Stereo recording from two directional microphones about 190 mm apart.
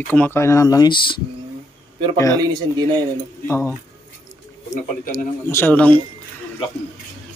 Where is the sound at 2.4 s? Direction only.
20° right (ahead or behind).